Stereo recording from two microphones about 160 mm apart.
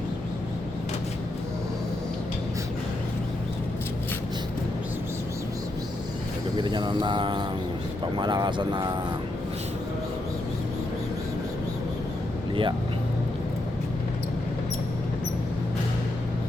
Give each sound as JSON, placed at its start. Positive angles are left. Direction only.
{"t": 6.6, "sound": "speech", "side_deg": -30}